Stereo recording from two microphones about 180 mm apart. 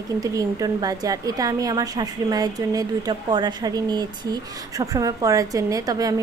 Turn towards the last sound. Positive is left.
turn(degrees=-20)  # may be behind; listen again after turning